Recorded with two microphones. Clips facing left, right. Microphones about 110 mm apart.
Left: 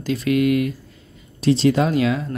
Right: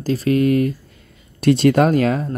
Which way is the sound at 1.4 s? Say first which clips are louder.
Right 3 dB; 60° right (ahead or behind).